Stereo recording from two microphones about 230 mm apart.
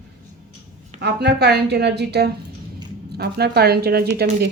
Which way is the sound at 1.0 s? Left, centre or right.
Right.